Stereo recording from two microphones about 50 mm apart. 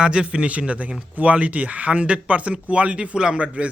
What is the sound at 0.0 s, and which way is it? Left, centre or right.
Speech, centre.